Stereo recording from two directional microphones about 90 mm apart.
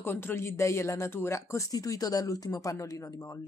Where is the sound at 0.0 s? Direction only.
25° left (ahead or behind).